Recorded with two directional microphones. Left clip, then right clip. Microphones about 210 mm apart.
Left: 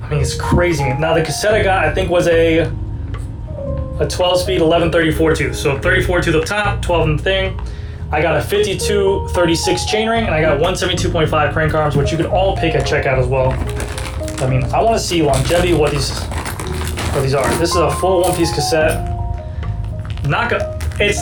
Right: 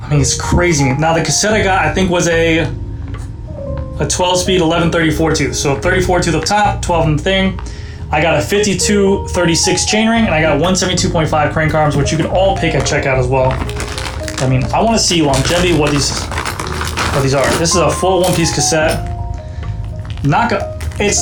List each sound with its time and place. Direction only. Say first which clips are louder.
0.1 s speech: right 2 dB; 35° right (ahead or behind)
4.0 s speech: right 1 dB; 40° right (ahead or behind)
13.6 s music: right 3 dB; centre (ahead or behind)
14.8 s speech: right 1 dB; 35° right (ahead or behind)
17.6 s speech: right 2 dB; 40° right (ahead or behind)
20.3 s speech: right 3 dB; 25° right (ahead or behind)